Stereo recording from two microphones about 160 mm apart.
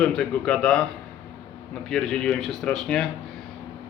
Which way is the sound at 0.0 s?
5° left (ahead or behind).